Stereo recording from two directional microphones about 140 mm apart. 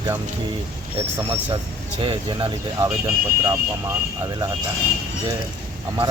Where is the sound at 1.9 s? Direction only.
40° right (ahead or behind).